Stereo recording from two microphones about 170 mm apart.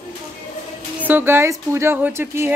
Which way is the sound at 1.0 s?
10° right (ahead or behind).